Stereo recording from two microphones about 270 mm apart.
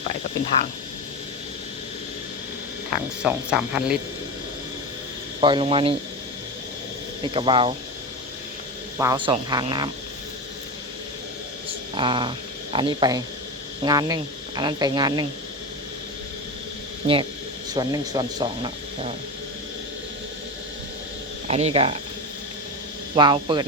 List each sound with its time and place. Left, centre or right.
3.2 s speech: centre
5.4 s speech: centre
7.2 s speech: centre
9.0 s speech: centre
11.7 s a sound: centre
12.7 s speech: centre
17.7 s speech: centre
21.4 s speech: right
23.1 s speech: centre